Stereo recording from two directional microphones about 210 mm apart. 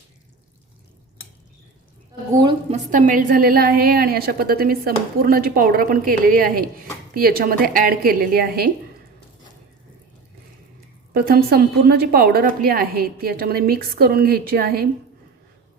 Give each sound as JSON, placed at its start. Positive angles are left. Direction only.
{"t": 2.3, "sound": "a woman's voice", "side_deg": -20}
{"t": 11.1, "sound": "a woman's voice", "side_deg": -45}